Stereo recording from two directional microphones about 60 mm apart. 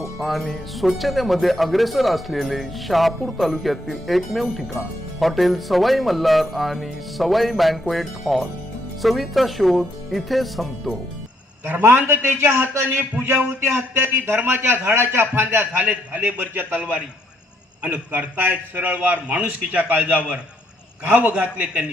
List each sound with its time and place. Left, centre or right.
0.2 s music: centre
11.6 s a man's voice: right
16.8 s a man's voice: centre